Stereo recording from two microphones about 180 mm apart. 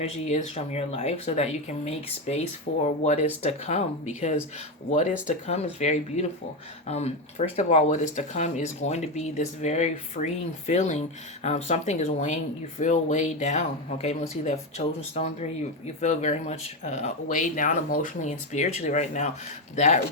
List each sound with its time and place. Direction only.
0.0 s speech: 35° left (ahead or behind)
5.2 s speech: 40° left (ahead or behind)